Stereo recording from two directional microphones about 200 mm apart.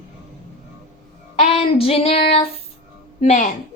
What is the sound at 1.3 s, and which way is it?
Child singing, 30° left (ahead or behind).